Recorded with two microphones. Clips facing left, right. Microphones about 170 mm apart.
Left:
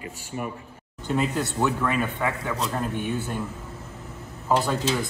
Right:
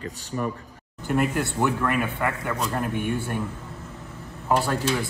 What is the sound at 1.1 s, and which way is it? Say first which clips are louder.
Speech: right 1 dB; 10° right (ahead or behind).